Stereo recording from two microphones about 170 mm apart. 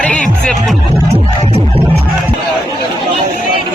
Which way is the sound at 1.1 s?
35° right (ahead or behind).